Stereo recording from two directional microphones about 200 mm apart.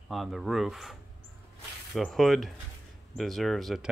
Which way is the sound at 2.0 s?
Centre (ahead or behind).